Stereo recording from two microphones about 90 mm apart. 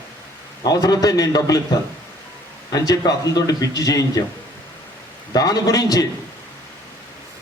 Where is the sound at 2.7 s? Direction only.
45° left (ahead or behind).